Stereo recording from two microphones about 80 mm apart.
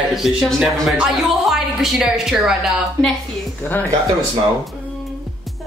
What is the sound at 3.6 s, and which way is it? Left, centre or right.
Speech, left.